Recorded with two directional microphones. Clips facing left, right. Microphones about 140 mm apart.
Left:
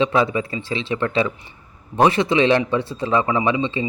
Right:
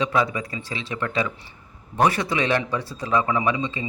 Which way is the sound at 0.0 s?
25° left (ahead or behind).